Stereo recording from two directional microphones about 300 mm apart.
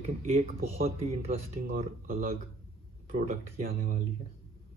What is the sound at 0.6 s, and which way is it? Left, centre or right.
Speech, right.